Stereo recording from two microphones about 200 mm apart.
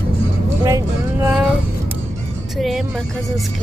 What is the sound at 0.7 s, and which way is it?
Vehicle, 15° right (ahead or behind).